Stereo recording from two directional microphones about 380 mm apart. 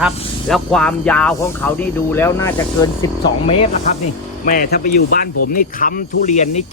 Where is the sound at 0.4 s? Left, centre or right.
Centre.